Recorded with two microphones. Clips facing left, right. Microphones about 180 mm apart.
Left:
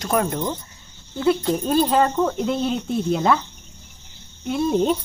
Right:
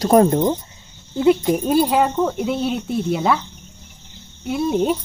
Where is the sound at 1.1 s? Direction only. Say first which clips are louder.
Right 4 dB; 15° right (ahead or behind).